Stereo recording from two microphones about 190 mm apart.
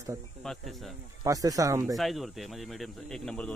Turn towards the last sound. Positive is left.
turn(degrees=5)  # may be behind; listen again after turning